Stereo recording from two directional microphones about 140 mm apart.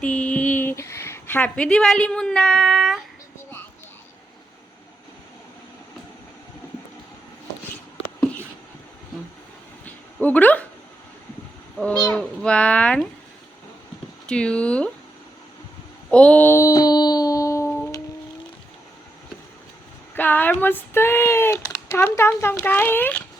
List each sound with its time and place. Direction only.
0.0 s a sound: 10° left (ahead or behind)
9.8 s dog: 10° left (ahead or behind)
12.1 s speech: 5° left (ahead or behind)
14.3 s speech: 5° left (ahead or behind)
16.0 s a sound: 10° left (ahead or behind)
20.1 s speech: 15° left (ahead or behind)